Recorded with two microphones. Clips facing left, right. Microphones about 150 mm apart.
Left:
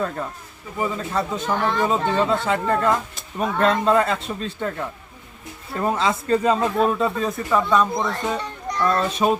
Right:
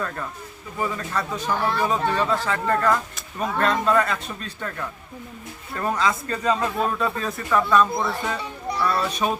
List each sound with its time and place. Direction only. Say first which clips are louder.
0.8 s speech: left 3 dB; 20° left (ahead or behind)
1.5 s speech: left 2 dB; 5° right (ahead or behind)
1.9 s speech: left 2 dB; 25° left (ahead or behind)
7.9 s speech: left 1 dB; 5° right (ahead or behind)
8.4 s children playing: left 2 dB; 5° right (ahead or behind)
9.0 s speech: left 4 dB; 25° left (ahead or behind)